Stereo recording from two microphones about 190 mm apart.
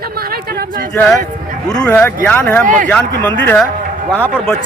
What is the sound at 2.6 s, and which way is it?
Speech, 45° right (ahead or behind).